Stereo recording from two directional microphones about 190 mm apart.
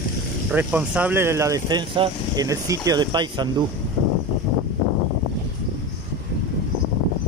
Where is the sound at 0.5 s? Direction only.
5° right (ahead or behind); by 3.6 s 25° right (ahead or behind).